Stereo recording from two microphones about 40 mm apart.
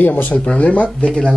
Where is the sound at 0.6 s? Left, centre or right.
Left.